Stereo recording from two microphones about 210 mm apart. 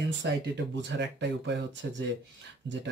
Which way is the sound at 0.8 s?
60° right (ahead or behind).